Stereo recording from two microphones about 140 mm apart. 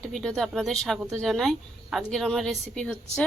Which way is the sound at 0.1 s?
5° left (ahead or behind).